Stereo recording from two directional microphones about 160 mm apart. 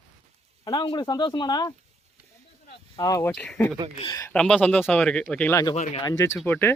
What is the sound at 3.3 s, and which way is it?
Speech, 5° left (ahead or behind).